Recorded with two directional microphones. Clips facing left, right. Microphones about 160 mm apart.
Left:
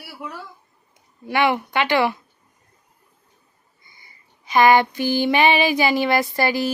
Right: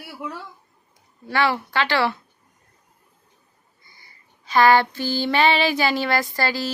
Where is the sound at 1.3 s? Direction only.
15° left (ahead or behind).